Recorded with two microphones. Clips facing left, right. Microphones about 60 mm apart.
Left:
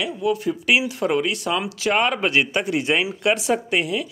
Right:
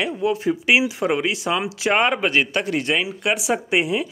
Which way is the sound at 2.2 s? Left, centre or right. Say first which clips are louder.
Even; centre.